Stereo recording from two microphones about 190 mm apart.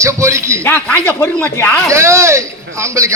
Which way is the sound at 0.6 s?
10° left (ahead or behind).